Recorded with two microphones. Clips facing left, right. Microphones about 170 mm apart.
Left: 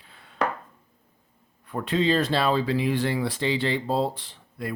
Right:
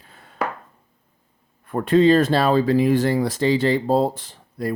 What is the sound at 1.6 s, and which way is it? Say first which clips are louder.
Speech: right 9 dB; 50° right (ahead or behind).